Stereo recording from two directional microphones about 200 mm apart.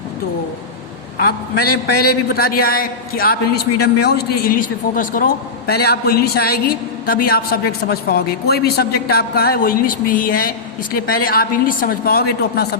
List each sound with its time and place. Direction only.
1.5 s a man's voice: 50° left (ahead or behind)